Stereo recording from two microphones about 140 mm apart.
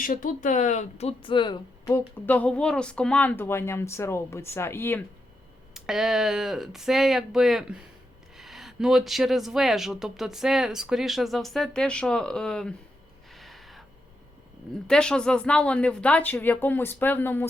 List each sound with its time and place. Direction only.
0.0 s speech: 80° left; by 1.5 s 35° left (ahead or behind)
1.9 s speech: 10° left (ahead or behind)
5.7 s speech: 5° right (ahead or behind)
13.3 s gasp: centre (ahead or behind)
14.8 s speech: 5° left (ahead or behind)